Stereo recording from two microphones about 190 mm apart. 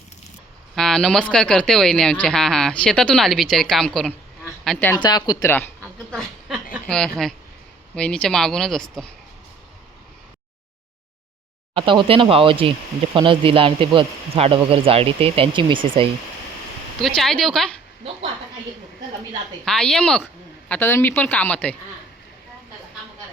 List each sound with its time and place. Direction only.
0.8 s a woman's voice: 5° left (ahead or behind)
5.0 s a woman's voice: 20° left (ahead or behind)
6.1 s a sound: centre (ahead or behind)
6.8 s speech: 5° left (ahead or behind)
11.7 s speech: 25° right (ahead or behind)
17.0 s speech: centre (ahead or behind)
19.6 s a woman's voice: centre (ahead or behind)